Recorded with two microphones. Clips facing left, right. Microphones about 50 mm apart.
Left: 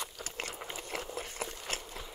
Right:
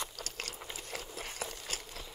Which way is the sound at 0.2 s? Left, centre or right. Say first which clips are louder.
Left 3 dB; left.